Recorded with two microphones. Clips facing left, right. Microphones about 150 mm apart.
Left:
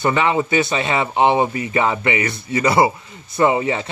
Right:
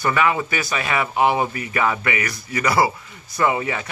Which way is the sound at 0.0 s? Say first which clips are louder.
Left 2 dB; 25° left (ahead or behind).